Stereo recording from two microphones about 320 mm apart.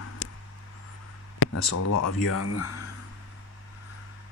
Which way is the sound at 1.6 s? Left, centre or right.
Left.